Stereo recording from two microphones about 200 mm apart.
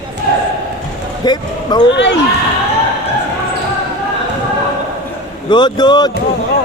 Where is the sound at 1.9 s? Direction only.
60° left (ahead or behind).